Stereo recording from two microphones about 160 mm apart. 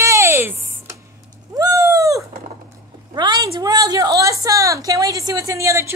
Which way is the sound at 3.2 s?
30° right (ahead or behind).